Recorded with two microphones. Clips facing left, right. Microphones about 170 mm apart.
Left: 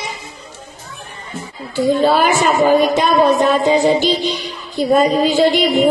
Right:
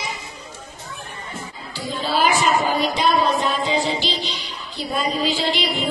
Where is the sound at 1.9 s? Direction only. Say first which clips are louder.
Left 7 dB; 55° left (ahead or behind).